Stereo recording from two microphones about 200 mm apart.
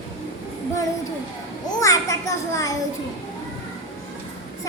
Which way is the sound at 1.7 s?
15° left (ahead or behind).